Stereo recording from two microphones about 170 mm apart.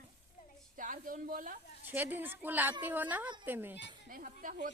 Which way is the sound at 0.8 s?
50° right (ahead or behind).